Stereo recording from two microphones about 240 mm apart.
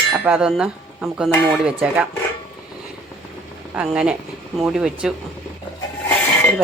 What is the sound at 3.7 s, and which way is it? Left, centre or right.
Speech, centre.